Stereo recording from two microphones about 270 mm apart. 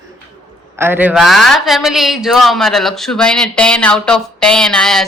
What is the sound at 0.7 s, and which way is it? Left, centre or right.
A man's voice, centre.